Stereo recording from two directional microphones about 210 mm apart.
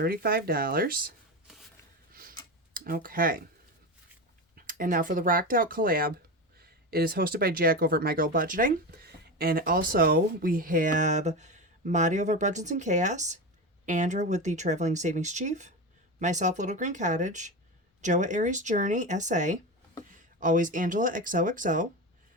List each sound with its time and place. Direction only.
0.0 s speech: 45° right (ahead or behind)
2.7 s speech: 40° right (ahead or behind)
4.5 s speech: 40° right (ahead or behind)